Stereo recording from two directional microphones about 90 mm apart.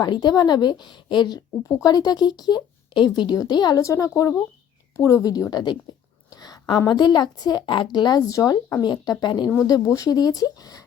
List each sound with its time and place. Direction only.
0.0 s a woman's voice: 50° left (ahead or behind)
1.6 s a woman's voice: 45° left (ahead or behind)
3.8 s a woman's voice: 35° left (ahead or behind); by 9.5 s 55° left (ahead or behind)
9.6 s a woman's voice: 40° left (ahead or behind)